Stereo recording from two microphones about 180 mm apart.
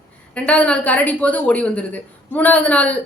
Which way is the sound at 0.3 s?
5° left (ahead or behind).